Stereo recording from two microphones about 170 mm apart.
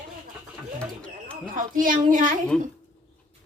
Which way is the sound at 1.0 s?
5° left (ahead or behind).